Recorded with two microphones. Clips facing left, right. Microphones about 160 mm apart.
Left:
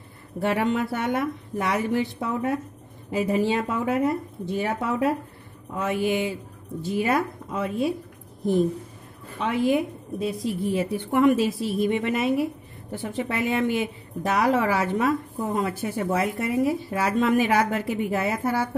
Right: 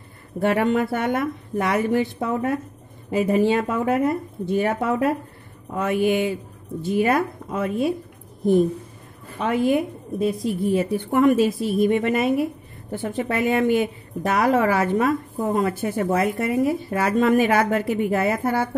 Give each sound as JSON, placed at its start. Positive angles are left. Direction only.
{"t": 0.4, "sound": "a woman's voice", "side_deg": -55}
{"t": 9.4, "sound": "a woman's voice", "side_deg": -50}